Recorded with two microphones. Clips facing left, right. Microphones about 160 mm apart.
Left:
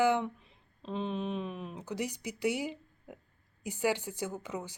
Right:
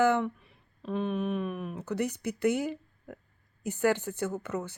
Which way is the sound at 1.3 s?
60° right (ahead or behind).